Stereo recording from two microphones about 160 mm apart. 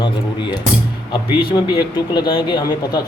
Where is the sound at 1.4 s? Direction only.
30° left (ahead or behind).